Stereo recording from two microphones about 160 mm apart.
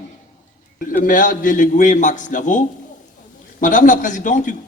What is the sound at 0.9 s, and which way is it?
A man's voice, 55° left (ahead or behind).